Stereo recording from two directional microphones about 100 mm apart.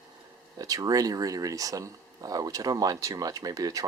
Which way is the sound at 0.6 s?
35° right (ahead or behind).